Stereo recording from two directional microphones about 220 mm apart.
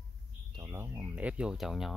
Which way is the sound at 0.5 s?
15° right (ahead or behind).